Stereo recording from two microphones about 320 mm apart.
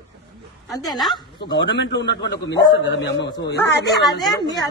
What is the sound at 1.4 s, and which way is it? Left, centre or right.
A man's voice, left.